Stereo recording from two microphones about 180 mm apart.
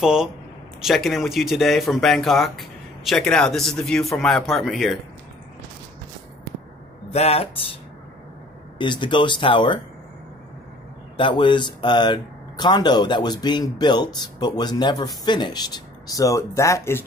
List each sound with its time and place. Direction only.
0.0 s speech: 5° right (ahead or behind)
7.1 s speech: 35° left (ahead or behind)
8.7 s speech: 25° left (ahead or behind)
11.1 s speech: 25° left (ahead or behind)